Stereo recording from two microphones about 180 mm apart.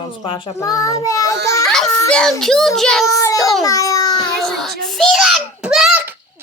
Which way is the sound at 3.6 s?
20° left (ahead or behind).